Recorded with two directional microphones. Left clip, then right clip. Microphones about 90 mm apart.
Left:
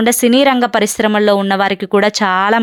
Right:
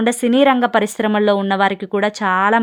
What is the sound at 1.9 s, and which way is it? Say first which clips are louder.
Speech: left 5 dB; 40° left (ahead or behind).